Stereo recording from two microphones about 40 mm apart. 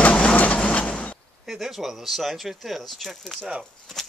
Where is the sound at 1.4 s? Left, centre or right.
Centre.